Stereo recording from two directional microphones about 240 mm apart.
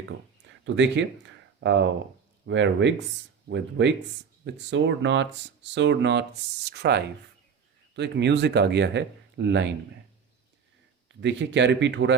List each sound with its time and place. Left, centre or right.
0.0 s a sound: right
2.5 s speech: right
11.2 s speech: right